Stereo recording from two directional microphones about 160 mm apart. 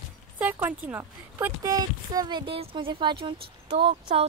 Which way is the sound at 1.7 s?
25° right (ahead or behind).